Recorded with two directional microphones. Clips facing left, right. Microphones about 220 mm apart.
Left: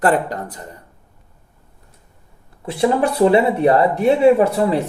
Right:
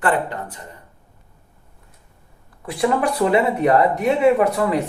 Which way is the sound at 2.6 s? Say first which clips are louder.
Left 3 dB; 25° left (ahead or behind).